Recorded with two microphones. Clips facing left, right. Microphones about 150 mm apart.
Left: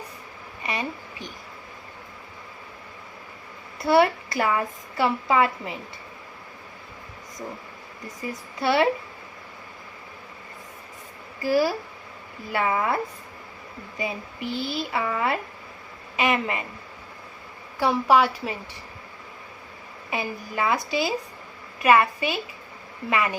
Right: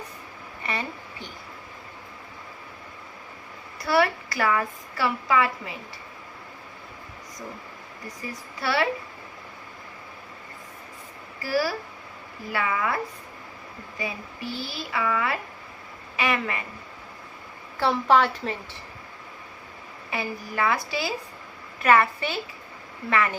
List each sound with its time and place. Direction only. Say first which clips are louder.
0.6 s a sound: left 1 dB; 15° left (ahead or behind)
3.8 s a woman's voice: left 4 dB; 25° left (ahead or behind)
8.0 s a woman's voice: left 3 dB; 20° left (ahead or behind)
11.4 s a woman's voice: left 4 dB; 20° left (ahead or behind)
14.0 s a woman's voice: left 3 dB; 20° left (ahead or behind)
17.7 s a woman's voice: left 1 dB; 10° left (ahead or behind)
20.1 s a woman's voice: left 1 dB; 20° left (ahead or behind)